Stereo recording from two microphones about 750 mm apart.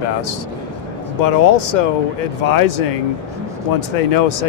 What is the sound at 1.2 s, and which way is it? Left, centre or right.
Speech, left.